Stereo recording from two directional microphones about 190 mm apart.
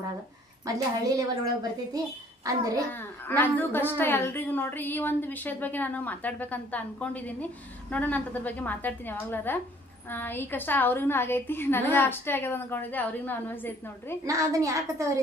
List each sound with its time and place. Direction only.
0.7 s a woman's voice: 15° right (ahead or behind)
2.9 s a woman's voice: 10° left (ahead or behind)
14.2 s a woman's voice: 15° right (ahead or behind)